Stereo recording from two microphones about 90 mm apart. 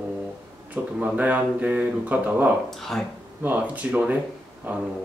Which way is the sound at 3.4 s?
15° right (ahead or behind).